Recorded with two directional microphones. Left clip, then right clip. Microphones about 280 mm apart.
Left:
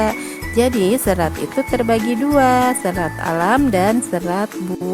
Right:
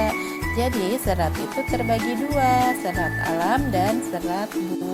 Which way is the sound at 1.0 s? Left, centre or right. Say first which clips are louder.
Left 6 dB; left.